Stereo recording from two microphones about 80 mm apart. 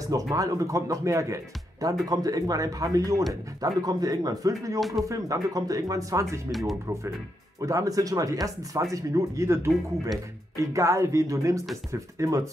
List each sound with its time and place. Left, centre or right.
0.1 s speech: right
4.7 s speech: centre
5.0 s speech: right
7.6 s speech: right
10.7 s speech: right